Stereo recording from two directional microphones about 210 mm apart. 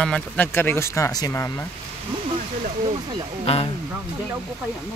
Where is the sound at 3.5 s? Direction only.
30° left (ahead or behind).